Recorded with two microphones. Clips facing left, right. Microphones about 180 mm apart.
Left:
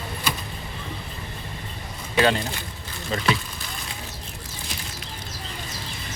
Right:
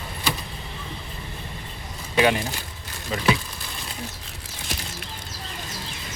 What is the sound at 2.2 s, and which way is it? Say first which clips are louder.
Speech: even; 15° right (ahead or behind).